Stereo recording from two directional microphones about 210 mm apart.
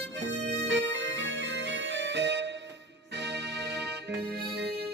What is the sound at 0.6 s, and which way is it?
Music, 60° right (ahead or behind).